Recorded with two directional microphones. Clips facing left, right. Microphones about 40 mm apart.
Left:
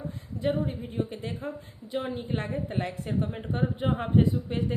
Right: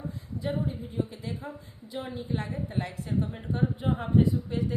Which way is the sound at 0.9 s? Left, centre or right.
Left.